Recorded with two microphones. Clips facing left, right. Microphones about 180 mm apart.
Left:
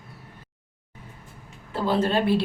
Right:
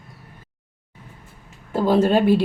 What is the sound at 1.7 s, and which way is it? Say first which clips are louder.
Speech: right 6 dB; 45° right (ahead or behind).